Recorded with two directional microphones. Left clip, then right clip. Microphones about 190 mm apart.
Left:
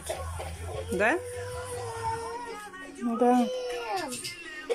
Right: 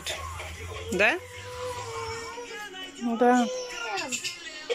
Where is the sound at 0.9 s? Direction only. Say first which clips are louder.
Right 2 dB; 5° left (ahead or behind).